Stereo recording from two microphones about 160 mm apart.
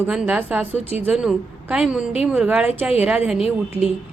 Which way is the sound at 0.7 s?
40° left (ahead or behind).